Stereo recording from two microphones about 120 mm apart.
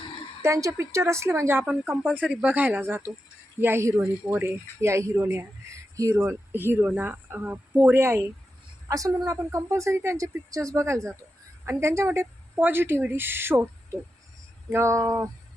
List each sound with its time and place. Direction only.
0.4 s speech: 25° right (ahead or behind)